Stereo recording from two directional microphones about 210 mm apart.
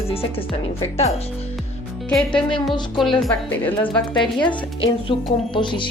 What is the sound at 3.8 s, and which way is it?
Speech, 20° left (ahead or behind).